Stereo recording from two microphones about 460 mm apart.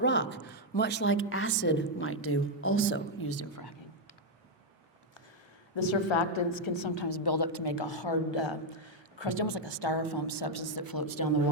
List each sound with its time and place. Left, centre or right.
0.0 s a woman's voice: left
5.7 s a woman's voice: left